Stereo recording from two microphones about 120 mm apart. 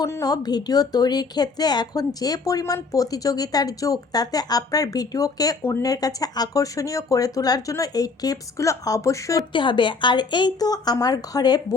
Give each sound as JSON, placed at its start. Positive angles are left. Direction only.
{"t": 0.0, "sound": "a woman's voice", "side_deg": 30}
{"t": 9.5, "sound": "a woman's voice", "side_deg": 40}